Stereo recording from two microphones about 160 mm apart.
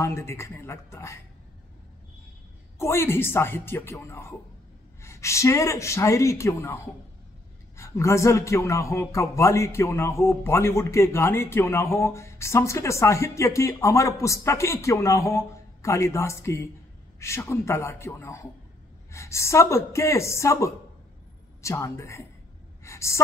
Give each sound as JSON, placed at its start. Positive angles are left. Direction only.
{"t": 0.0, "sound": "a man's voice", "side_deg": 15}
{"t": 2.8, "sound": "a man's voice", "side_deg": 15}
{"t": 22.8, "sound": "a sound", "side_deg": 20}